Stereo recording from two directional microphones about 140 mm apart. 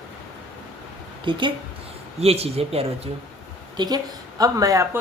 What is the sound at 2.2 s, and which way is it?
Speech, 45° right (ahead or behind).